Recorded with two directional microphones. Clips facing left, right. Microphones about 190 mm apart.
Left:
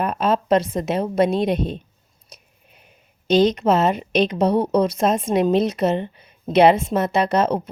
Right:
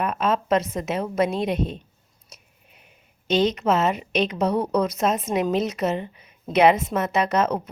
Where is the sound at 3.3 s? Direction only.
35° left (ahead or behind).